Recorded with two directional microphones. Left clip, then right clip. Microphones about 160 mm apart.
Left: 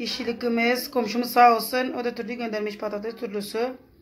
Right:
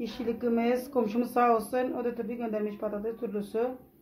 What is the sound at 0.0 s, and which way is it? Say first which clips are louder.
Speech: left 4 dB; 15° left (ahead or behind).